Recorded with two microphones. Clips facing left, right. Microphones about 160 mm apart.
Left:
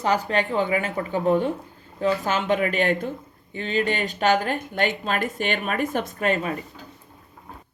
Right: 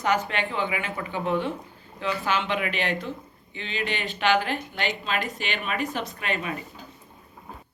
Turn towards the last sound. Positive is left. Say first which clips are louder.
# left 6 dB
turn(degrees=40)  # may be behind; listen again after turning